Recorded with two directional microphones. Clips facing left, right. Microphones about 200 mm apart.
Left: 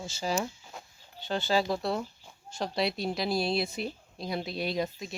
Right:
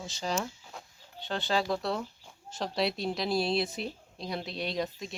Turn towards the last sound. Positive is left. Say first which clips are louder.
# left 2 dB
turn(degrees=0)  # may be behind; listen again after turning